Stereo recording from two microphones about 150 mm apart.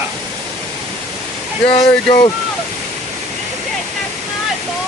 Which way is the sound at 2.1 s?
30° left (ahead or behind).